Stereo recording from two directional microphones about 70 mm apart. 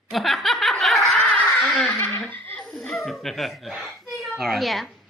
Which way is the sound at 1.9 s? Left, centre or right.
Left.